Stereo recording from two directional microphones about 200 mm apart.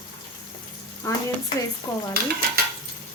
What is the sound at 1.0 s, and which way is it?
Speech, 15° left (ahead or behind).